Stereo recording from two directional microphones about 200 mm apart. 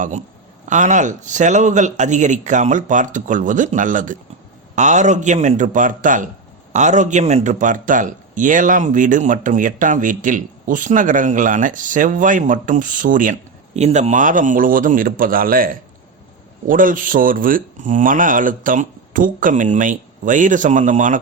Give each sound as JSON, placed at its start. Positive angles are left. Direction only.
{"t": 0.0, "sound": "a man's voice", "side_deg": -35}